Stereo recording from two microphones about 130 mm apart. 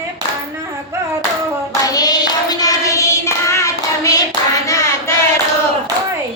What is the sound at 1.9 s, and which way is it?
Child singing, 30° left (ahead or behind).